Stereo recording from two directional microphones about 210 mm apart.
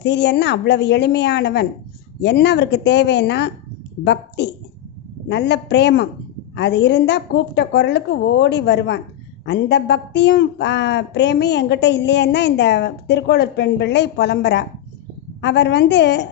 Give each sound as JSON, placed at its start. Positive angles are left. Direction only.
{"t": 0.0, "sound": "a woman's voice", "side_deg": 55}